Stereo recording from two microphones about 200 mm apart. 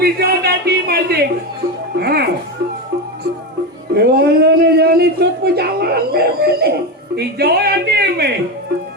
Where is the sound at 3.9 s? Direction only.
55° right (ahead or behind).